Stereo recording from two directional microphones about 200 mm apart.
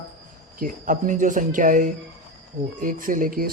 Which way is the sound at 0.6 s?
40° right (ahead or behind).